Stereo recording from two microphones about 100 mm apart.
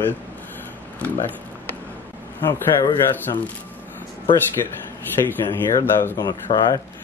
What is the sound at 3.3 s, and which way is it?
Speech, 40° left (ahead or behind).